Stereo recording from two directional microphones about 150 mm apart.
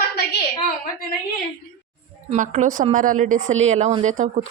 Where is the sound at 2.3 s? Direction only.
50° right (ahead or behind).